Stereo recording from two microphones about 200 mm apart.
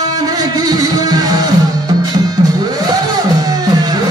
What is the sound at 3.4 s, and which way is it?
Music, 20° right (ahead or behind).